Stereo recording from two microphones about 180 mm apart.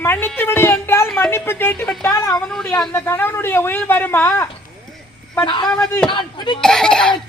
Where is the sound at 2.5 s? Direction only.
5° left (ahead or behind).